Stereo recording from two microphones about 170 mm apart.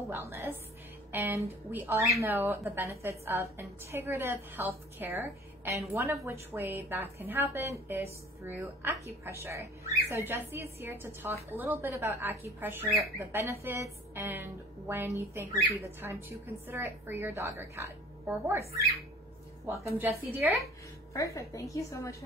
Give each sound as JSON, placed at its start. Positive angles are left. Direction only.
{"t": 0.1, "sound": "a woman's voice", "side_deg": -15}
{"t": 21.1, "sound": "a woman's voice", "side_deg": 20}